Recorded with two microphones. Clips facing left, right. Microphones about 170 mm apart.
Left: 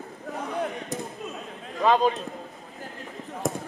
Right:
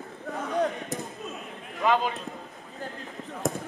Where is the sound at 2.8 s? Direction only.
Centre (ahead or behind).